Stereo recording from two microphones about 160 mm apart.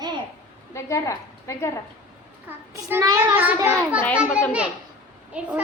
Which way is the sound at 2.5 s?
10° right (ahead or behind).